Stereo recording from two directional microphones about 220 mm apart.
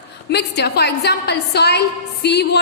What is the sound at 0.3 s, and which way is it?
A woman's voice, 50° left (ahead or behind).